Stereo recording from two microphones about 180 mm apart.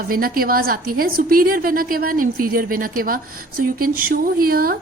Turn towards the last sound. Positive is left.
turn(degrees=-55)  # may be behind; listen again after turning